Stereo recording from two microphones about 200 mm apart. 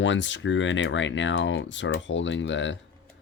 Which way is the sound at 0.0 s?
65° left (ahead or behind).